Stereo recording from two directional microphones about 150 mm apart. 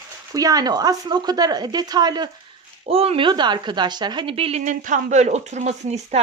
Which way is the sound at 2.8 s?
40° right (ahead or behind).